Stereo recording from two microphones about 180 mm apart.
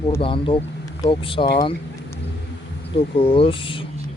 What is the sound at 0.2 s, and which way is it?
A man's voice, 30° left (ahead or behind).